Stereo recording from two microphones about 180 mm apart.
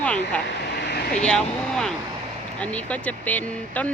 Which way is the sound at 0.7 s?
70° left (ahead or behind).